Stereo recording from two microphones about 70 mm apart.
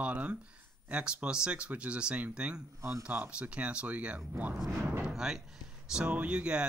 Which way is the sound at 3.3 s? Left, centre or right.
Centre.